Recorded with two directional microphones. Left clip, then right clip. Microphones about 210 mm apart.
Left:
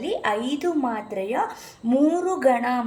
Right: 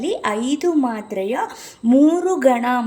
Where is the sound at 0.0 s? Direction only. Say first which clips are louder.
Right 3 dB; 40° right (ahead or behind).